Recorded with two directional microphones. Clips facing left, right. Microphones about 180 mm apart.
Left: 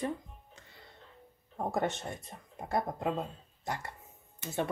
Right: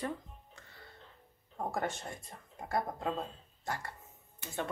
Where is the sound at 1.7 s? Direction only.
20° left (ahead or behind).